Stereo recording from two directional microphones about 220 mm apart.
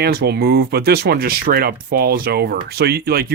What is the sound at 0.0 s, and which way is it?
Speech, 45° right (ahead or behind).